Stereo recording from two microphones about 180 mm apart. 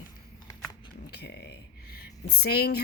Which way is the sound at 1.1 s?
70° left (ahead or behind).